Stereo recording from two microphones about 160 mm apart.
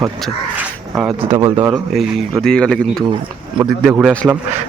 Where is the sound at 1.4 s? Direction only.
15° right (ahead or behind).